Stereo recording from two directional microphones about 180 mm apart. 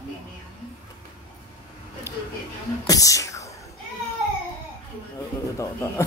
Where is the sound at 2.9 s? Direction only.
20° left (ahead or behind).